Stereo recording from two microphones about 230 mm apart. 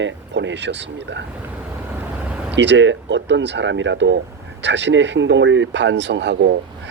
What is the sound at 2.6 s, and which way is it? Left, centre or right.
Speech, right.